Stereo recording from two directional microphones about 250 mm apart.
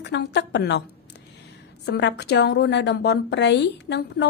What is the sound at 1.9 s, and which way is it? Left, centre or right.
A woman's voice, left.